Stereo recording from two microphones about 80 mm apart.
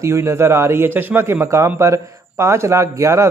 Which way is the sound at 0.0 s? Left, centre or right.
Right.